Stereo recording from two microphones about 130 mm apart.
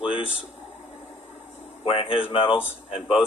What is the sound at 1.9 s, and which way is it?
Speech, 45° left (ahead or behind).